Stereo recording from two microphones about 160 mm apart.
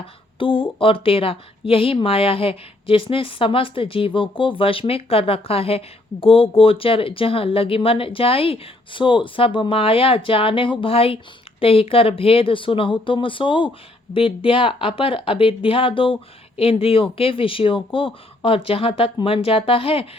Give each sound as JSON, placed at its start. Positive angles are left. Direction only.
{"t": 0.3, "sound": "speech", "side_deg": 35}